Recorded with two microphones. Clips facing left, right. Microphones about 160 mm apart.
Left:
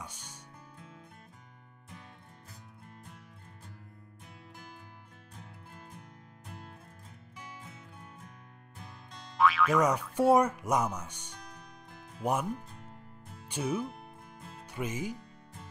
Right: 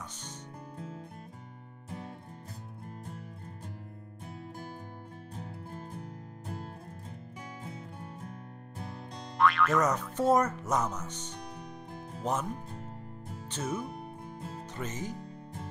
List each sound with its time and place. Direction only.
0.0 s music: 10° left (ahead or behind)
0.7 s music: 40° right (ahead or behind)
5.3 s music: 35° right (ahead or behind)
9.4 s speech: centre (ahead or behind)
11.5 s music: 30° right (ahead or behind)
12.2 s speech: 10° left (ahead or behind)
12.5 s music: 35° right (ahead or behind)
13.5 s speech: 10° left (ahead or behind)
13.9 s music: 35° right (ahead or behind)
14.7 s speech: 10° left (ahead or behind)
15.1 s music: 35° right (ahead or behind)